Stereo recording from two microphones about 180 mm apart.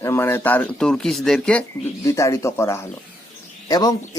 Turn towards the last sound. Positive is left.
turn(degrees=20)  # may be behind; listen again after turning